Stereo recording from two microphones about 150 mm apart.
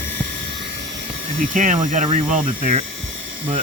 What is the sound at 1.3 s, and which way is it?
Speech, 60° right (ahead or behind).